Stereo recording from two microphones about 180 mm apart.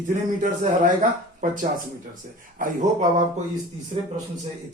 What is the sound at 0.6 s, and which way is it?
Speech, 45° right (ahead or behind).